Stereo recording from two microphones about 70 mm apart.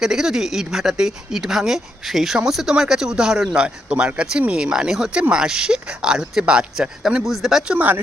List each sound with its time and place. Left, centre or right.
0.0 s speech: centre
7.7 s speech: right